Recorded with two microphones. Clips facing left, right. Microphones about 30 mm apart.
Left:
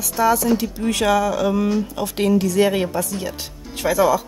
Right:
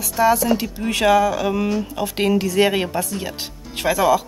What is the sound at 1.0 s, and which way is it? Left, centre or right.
Speech, right.